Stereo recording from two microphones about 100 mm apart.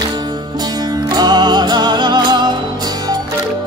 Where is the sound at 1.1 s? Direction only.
45° right (ahead or behind).